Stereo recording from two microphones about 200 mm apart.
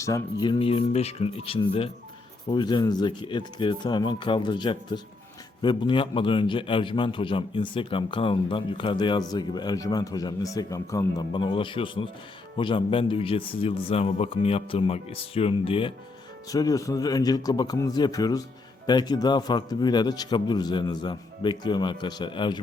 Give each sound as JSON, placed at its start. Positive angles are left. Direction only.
{"t": 0.0, "sound": "a man's voice", "side_deg": 20}
{"t": 16.5, "sound": "a man's voice", "side_deg": 15}